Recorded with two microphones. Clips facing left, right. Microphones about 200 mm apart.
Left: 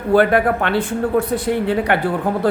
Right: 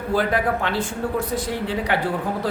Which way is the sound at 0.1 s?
60° left (ahead or behind).